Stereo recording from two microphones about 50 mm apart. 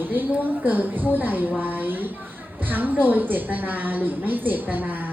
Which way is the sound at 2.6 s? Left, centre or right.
Right.